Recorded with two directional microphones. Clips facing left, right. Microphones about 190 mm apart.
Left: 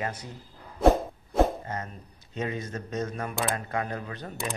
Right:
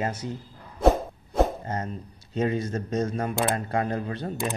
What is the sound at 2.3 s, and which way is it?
Speech, 35° right (ahead or behind).